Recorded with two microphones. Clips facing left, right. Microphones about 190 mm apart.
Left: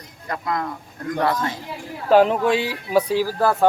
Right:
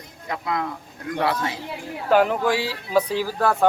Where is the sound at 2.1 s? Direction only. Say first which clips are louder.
Left 3 dB; 30° left (ahead or behind); by 3.5 s 10° left (ahead or behind).